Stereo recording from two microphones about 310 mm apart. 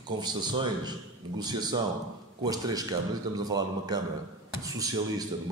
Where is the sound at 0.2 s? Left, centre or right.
Centre.